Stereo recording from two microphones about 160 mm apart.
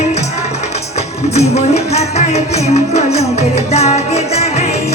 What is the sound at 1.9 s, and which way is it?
Music, 40° left (ahead or behind).